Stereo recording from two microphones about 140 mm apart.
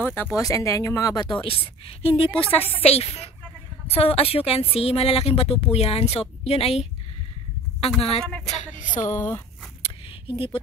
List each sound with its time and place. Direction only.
0.0 s a woman's voice: 15° left (ahead or behind); by 6.9 s 45° left (ahead or behind)
8.5 s music: 65° left (ahead or behind)
9.0 s speech: 20° left (ahead or behind)
9.8 s a sound: 40° left (ahead or behind)